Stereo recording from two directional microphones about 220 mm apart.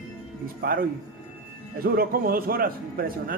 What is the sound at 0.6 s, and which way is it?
Speech, 40° right (ahead or behind).